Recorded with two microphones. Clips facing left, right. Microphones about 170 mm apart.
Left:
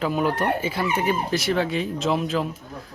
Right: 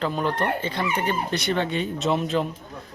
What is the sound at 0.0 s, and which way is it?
Speech, 5° left (ahead or behind).